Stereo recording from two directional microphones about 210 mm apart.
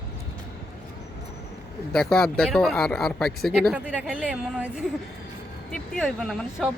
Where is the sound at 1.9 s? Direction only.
5° left (ahead or behind).